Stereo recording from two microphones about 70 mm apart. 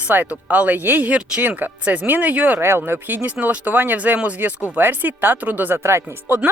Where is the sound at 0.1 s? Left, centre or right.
Right.